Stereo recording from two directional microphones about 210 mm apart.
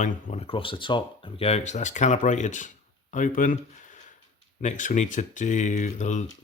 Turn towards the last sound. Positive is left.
turn(degrees=35)  # may be behind; listen again after turning